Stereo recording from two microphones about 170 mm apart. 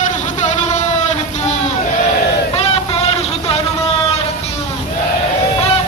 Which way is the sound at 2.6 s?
40° left (ahead or behind).